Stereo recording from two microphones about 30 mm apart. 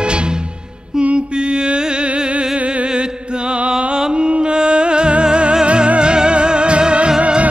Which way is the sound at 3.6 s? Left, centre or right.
Right.